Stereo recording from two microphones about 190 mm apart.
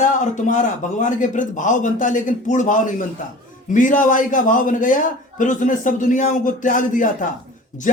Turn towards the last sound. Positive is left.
turn(degrees=45)  # may be behind; listen again after turning